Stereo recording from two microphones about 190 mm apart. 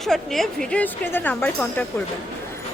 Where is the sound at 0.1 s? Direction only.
5° left (ahead or behind).